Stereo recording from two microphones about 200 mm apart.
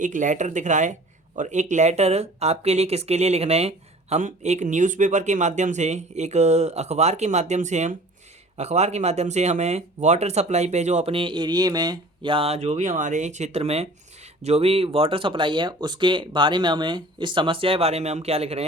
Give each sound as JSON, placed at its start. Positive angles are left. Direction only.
{"t": 0.0, "sound": "speech", "side_deg": -40}